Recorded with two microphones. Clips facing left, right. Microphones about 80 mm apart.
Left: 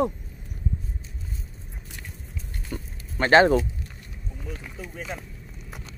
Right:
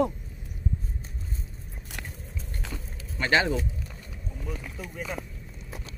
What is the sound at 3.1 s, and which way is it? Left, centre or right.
Speech, left.